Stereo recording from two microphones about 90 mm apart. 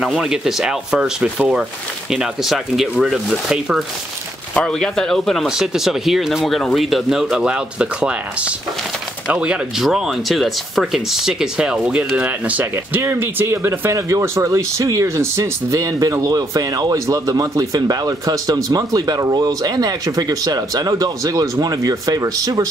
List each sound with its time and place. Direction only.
0.0 s speech: 5° right (ahead or behind)
4.6 s speech: 10° left (ahead or behind); by 22.7 s 40° right (ahead or behind)